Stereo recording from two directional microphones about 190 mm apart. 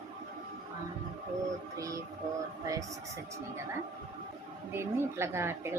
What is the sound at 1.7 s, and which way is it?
Music, 15° right (ahead or behind).